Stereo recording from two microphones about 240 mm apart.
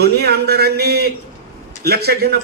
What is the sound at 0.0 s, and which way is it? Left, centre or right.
A man's voice, right.